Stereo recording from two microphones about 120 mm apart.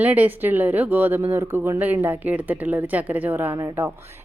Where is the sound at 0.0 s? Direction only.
10° right (ahead or behind).